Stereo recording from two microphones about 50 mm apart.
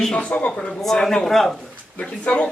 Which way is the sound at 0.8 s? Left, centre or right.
Centre.